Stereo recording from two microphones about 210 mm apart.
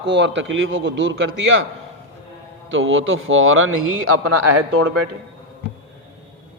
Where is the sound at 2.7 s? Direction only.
65° right (ahead or behind).